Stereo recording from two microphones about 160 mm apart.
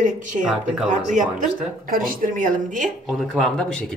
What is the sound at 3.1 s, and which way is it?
Speech, centre (ahead or behind).